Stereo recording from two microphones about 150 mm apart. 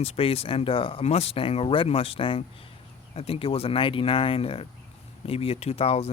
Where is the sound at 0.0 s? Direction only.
40° left (ahead or behind).